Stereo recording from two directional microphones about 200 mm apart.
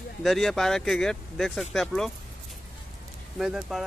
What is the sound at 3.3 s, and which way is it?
Speech, centre (ahead or behind).